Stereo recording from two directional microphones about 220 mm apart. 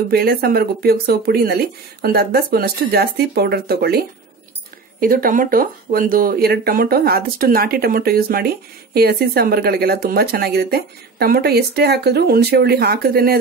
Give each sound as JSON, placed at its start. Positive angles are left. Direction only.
{"t": 0.1, "sound": "speech", "side_deg": -45}
{"t": 5.0, "sound": "speech", "side_deg": -40}